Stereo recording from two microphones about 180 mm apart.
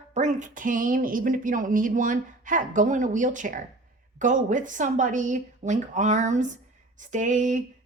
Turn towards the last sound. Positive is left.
turn(degrees=-45)  # may be behind; listen again after turning